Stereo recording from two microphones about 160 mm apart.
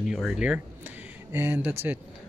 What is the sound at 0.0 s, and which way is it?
Speech, centre (ahead or behind).